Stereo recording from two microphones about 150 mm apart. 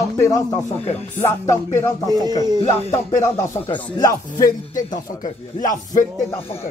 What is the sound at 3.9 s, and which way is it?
Music, 25° left (ahead or behind).